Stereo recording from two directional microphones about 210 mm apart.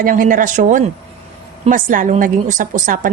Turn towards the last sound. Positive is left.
turn(degrees=-40)  # may be behind; listen again after turning